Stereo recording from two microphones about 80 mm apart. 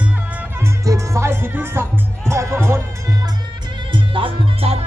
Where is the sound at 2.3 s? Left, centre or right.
Right.